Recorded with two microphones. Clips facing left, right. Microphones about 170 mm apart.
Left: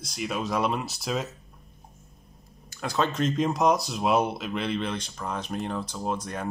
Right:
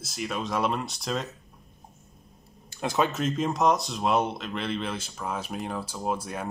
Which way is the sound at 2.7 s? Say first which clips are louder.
Right 3 dB; 20° right (ahead or behind).